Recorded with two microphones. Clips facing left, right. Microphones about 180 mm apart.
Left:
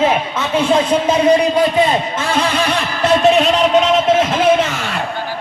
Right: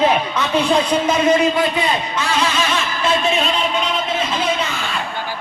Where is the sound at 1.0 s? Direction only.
30° left (ahead or behind).